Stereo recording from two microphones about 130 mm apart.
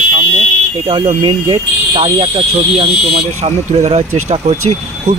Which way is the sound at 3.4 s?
55° right (ahead or behind).